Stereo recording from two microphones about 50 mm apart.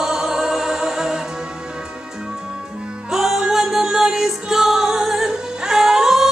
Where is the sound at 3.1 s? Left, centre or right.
Centre.